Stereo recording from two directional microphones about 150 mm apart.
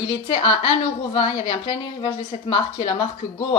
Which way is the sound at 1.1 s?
40° left (ahead or behind).